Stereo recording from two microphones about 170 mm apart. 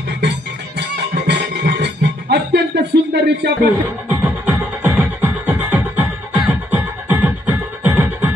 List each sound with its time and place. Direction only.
0.7 s music: 80° right
3.8 s music: 10° right (ahead or behind)